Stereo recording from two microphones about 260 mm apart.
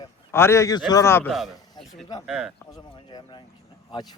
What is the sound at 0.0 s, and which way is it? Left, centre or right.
A man's voice, centre.